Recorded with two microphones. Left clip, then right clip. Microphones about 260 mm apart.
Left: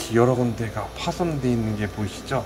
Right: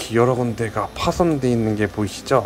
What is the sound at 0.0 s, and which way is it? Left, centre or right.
Speech, centre.